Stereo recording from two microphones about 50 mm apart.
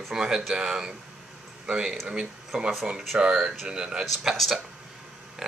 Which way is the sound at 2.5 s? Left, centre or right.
Centre.